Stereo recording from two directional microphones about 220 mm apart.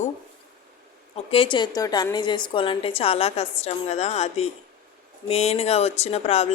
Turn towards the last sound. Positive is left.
turn(degrees=30)  # may be behind; listen again after turning